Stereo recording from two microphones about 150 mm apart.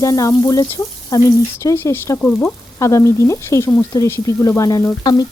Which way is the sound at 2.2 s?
10° left (ahead or behind).